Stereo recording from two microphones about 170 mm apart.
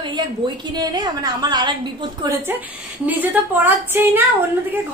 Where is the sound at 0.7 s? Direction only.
25° right (ahead or behind).